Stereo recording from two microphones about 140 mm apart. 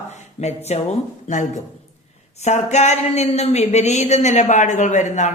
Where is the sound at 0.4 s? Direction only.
50° left (ahead or behind).